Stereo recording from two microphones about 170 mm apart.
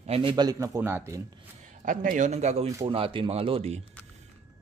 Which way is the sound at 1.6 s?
50° right (ahead or behind).